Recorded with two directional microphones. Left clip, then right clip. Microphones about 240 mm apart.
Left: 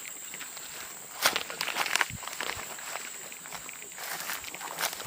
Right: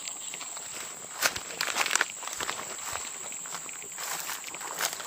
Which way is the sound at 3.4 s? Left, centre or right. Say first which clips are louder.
Right 2 dB; right.